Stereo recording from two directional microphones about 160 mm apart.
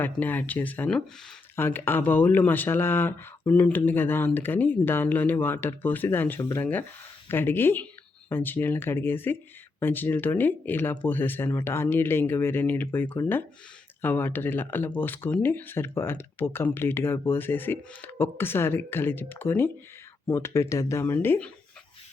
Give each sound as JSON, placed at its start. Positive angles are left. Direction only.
{"t": 0.0, "sound": "speech", "side_deg": 10}